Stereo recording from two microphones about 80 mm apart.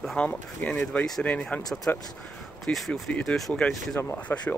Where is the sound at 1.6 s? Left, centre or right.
Left.